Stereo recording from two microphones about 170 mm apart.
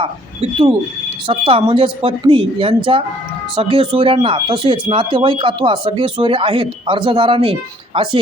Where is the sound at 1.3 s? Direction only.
30° right (ahead or behind).